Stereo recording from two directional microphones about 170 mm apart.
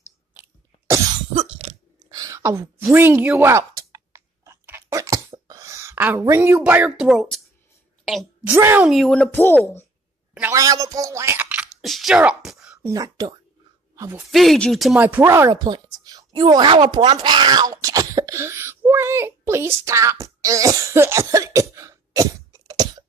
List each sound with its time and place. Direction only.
0.3 s cough: 10° right (ahead or behind)
1.3 s cough: 35° right (ahead or behind)
2.0 s a sound: 20° right (ahead or behind); by 8.3 s centre (ahead or behind)
8.5 s a woman's voice: 15° right (ahead or behind); by 9.8 s 10° left (ahead or behind)
10.5 s speech: 20° right (ahead or behind); by 12.7 s 5° right (ahead or behind)
12.8 s speech: 20° right (ahead or behind)
14.3 s speech: centre (ahead or behind); by 23.0 s 20° right (ahead or behind)